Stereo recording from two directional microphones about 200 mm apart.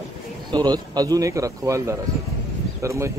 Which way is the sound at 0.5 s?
20° right (ahead or behind).